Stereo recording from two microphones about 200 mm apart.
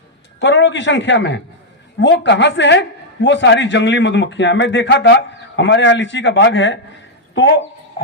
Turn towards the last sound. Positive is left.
turn(degrees=65)  # may be behind; listen again after turning